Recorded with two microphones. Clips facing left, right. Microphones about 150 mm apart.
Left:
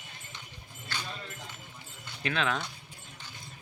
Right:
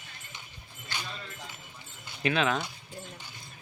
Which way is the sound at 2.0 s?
10° right (ahead or behind).